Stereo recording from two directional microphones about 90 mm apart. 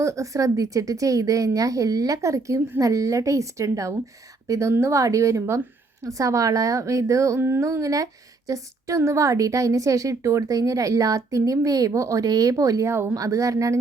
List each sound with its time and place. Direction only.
0.0 s a woman's voice: 35° right (ahead or behind)
12.9 s speech: 25° right (ahead or behind)
13.1 s a woman's voice: 40° right (ahead or behind)